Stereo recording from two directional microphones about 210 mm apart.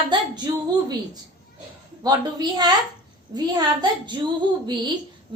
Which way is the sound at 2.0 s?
20° right (ahead or behind).